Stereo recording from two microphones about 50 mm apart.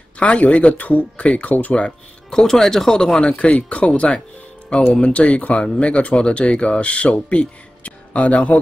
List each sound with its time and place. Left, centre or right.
0.2 s speech: left
2.3 s speech: centre; by 8.5 s left